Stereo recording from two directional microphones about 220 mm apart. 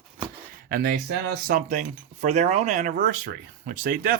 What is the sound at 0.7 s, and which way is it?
Speech, 45° right (ahead or behind).